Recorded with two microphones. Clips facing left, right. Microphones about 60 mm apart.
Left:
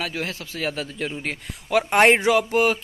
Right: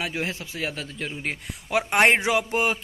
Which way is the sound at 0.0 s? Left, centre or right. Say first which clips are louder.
Even; centre.